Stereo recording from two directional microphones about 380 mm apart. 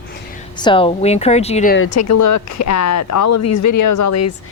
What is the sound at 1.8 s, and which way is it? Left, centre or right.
Speech, left.